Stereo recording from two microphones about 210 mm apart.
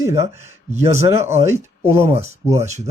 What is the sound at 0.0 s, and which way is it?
Speech, 15° right (ahead or behind).